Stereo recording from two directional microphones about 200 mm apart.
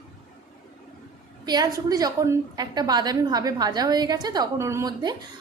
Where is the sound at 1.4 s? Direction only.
20° right (ahead or behind).